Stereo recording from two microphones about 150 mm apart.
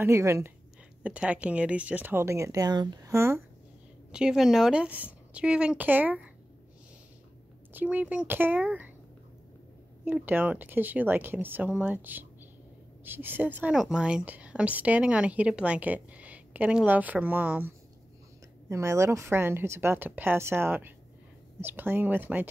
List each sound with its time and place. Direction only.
0.0 s a woman's voice: 20° right (ahead or behind)
1.0 s a woman's voice: 10° right (ahead or behind)
4.1 s a woman's voice: 5° right (ahead or behind)
7.7 s a woman's voice: 10° right (ahead or behind)
10.0 s a woman's voice: 10° right (ahead or behind)